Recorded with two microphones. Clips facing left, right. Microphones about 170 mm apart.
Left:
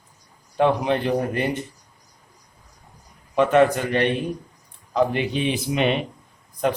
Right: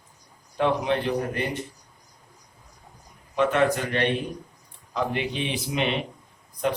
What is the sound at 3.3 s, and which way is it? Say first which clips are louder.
Speech: left 5 dB; 50° left (ahead or behind).